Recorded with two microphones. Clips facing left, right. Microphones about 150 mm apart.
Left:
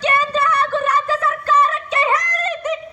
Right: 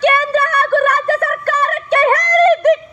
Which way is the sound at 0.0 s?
65° right (ahead or behind).